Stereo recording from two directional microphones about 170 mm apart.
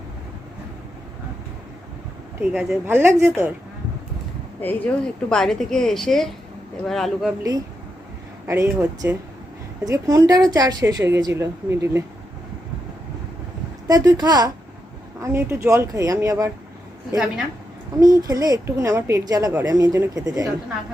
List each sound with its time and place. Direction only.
2.4 s a woman's voice: 5° right (ahead or behind)
4.6 s a woman's voice: 10° left (ahead or behind)
8.4 s speech: 15° right (ahead or behind)
13.8 s speech: 20° right (ahead or behind)
18.0 s speech: 20° right (ahead or behind)